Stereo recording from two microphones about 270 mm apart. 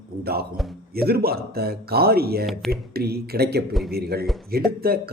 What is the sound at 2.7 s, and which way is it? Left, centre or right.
A man's voice, right.